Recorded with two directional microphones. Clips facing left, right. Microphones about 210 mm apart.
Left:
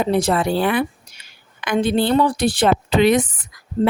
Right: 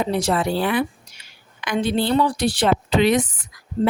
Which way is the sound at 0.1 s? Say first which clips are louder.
Left 3 dB; 55° left (ahead or behind).